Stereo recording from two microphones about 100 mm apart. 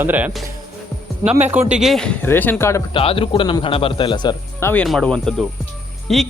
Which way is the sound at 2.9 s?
65° left (ahead or behind).